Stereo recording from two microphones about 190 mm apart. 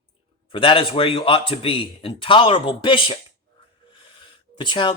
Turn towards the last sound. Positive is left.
turn(degrees=25)  # may be behind; listen again after turning